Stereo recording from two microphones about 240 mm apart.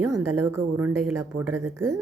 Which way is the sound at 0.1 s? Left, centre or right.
Right.